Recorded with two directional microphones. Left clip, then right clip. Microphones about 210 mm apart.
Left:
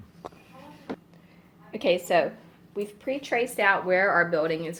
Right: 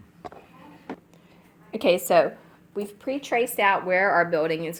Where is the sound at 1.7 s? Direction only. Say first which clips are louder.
Right 4 dB; 40° right (ahead or behind).